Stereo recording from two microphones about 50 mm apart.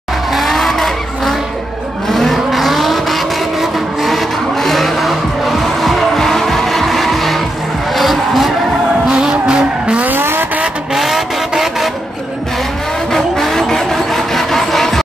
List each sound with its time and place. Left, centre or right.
0.3 s vehicle: centre
7.9 s skidding: centre
9.0 s vehicle: centre
10.0 s vehicle: right
11.0 s vehicle: centre
13.1 s vehicle: centre